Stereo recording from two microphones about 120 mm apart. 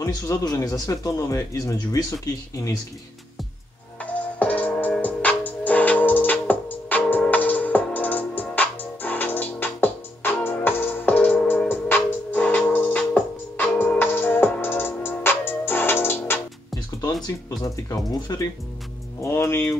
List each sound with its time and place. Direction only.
0.0 s speech: 30° left (ahead or behind)
4.0 s music: 10° left (ahead or behind)
17.3 s speech: 25° left (ahead or behind)